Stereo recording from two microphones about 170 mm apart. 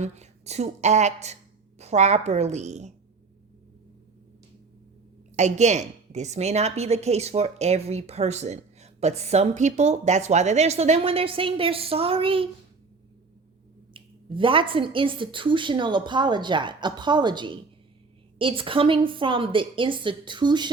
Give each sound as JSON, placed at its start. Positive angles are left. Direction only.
{"t": 0.0, "sound": "a woman's voice", "side_deg": -40}
{"t": 5.4, "sound": "a woman's voice", "side_deg": -40}
{"t": 13.9, "sound": "a woman's voice", "side_deg": -30}